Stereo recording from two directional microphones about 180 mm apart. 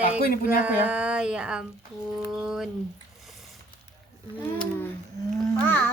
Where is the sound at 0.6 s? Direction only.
10° right (ahead or behind).